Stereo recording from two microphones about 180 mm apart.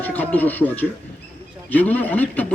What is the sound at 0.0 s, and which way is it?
A man's voice, 10° left (ahead or behind).